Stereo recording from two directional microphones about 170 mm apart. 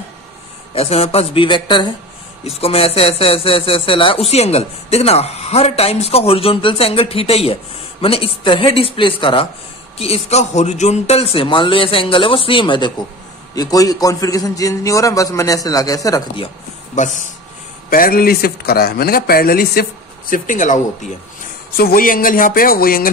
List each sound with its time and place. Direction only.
0.7 s a man's voice: 35° left (ahead or behind); by 16.4 s 20° left (ahead or behind)
16.9 s speech: 45° left (ahead or behind)
17.8 s speech: 60° left (ahead or behind)